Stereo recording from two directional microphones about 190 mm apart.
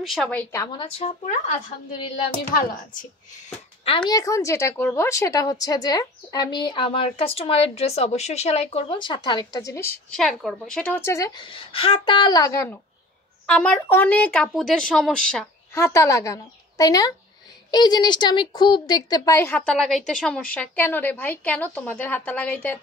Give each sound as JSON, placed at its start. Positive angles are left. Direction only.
{"t": 0.0, "sound": "a woman's voice", "side_deg": 0}
{"t": 0.9, "sound": "a woman's voice", "side_deg": 40}
{"t": 4.1, "sound": "a woman's voice", "side_deg": 15}
{"t": 10.1, "sound": "a woman's voice", "side_deg": 0}
{"t": 15.8, "sound": "a woman's voice", "side_deg": 15}